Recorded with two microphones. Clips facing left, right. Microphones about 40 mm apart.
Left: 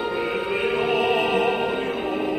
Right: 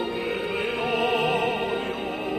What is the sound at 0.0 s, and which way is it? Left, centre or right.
Music, centre.